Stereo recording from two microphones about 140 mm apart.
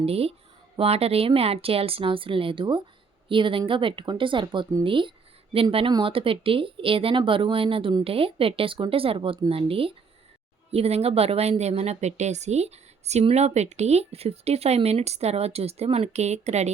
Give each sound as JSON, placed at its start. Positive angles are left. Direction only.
{"t": 0.0, "sound": "a woman's voice", "side_deg": -45}